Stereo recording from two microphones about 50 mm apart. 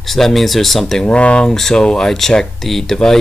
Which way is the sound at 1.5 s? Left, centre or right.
Centre.